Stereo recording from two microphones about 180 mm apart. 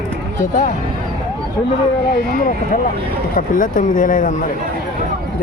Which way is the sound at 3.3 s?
50° left (ahead or behind).